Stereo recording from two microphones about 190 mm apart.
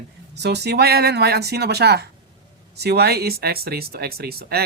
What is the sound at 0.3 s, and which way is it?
Speech, 60° right (ahead or behind).